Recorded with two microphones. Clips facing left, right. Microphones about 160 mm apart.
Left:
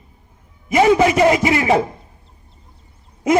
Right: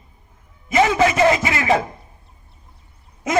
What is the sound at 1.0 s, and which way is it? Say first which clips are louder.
Speech: left 2 dB; 20° left (ahead or behind).